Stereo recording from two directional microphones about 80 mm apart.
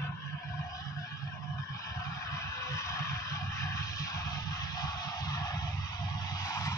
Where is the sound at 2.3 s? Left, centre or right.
Left.